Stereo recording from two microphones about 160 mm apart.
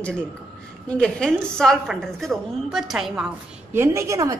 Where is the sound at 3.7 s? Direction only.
20° right (ahead or behind).